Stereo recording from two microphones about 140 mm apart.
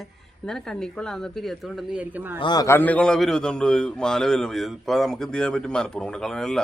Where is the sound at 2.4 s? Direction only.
30° left (ahead or behind).